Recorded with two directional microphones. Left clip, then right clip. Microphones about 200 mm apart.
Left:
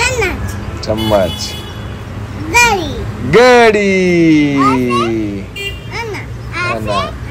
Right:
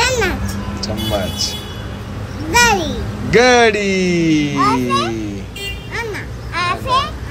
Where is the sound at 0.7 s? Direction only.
5° right (ahead or behind).